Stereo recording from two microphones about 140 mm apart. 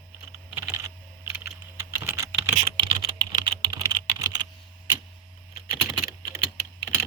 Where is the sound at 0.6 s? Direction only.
20° right (ahead or behind).